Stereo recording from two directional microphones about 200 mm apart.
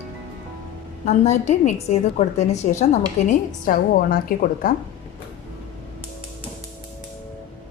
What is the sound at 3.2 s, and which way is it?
A woman's voice, 45° left (ahead or behind).